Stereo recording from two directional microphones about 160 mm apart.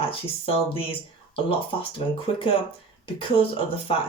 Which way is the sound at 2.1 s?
35° left (ahead or behind).